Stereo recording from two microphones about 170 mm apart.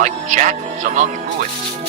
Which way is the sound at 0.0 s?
45° right (ahead or behind).